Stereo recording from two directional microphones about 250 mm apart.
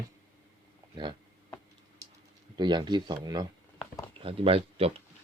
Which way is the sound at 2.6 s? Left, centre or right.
Centre.